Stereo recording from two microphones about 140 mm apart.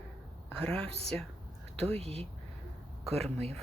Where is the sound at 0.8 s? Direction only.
45° right (ahead or behind).